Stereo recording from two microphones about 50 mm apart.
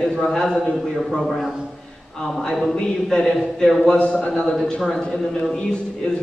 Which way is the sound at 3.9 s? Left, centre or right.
Left.